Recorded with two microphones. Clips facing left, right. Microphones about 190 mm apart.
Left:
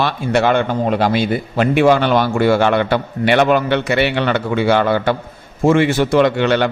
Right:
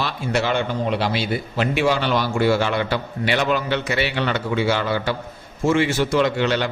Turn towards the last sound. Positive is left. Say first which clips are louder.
# left 6 dB
turn(degrees=60)  # may be behind; listen again after turning